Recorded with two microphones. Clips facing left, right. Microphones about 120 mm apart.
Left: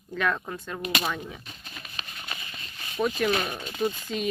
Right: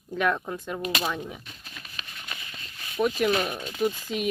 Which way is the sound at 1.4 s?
25° left (ahead or behind).